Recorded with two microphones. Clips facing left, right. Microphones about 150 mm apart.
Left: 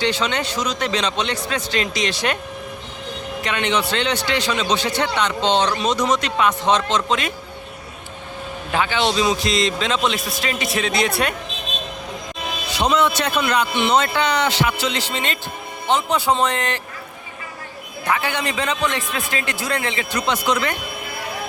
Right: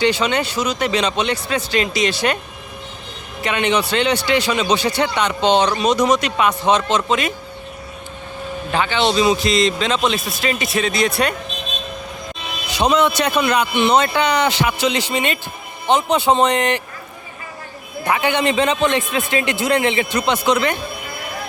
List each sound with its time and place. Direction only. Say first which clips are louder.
0.0 s a man's voice: right 4 dB; 10° right (ahead or behind)
3.4 s a man's voice: right 4 dB; 10° right (ahead or behind)
8.7 s a man's voice: right 2 dB; 5° left (ahead or behind)
12.8 s a man's voice: right 3 dB; 15° right (ahead or behind)
18.0 s a man's voice: right 5 dB; 20° right (ahead or behind)